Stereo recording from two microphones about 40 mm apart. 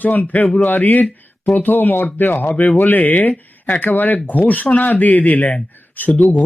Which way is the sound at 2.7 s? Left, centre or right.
Left.